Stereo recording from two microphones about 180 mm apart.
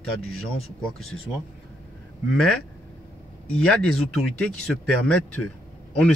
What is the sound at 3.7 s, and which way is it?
Speech, 5° left (ahead or behind).